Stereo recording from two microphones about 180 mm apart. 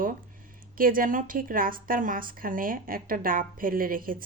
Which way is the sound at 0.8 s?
50° right (ahead or behind).